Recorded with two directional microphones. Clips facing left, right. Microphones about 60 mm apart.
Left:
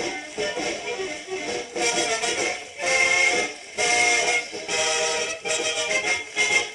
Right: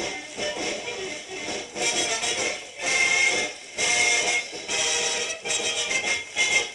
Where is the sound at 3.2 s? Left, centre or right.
Left.